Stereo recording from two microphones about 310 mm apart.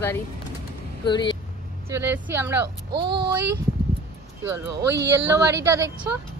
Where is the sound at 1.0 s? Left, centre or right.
Centre.